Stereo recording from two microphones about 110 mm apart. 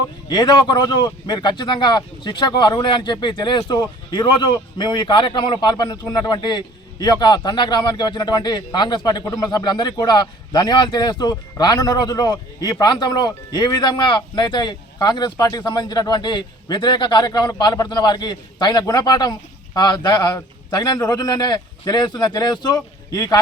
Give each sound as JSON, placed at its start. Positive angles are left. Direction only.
{"t": 0.3, "sound": "speech", "side_deg": 40}